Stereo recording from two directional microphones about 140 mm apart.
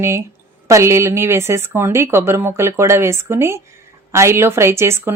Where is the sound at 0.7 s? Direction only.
20° right (ahead or behind).